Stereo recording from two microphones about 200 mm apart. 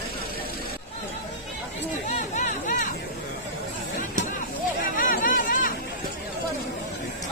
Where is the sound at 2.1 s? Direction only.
40° left (ahead or behind).